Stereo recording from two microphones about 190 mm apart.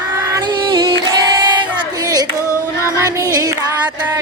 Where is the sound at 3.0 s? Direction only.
20° right (ahead or behind).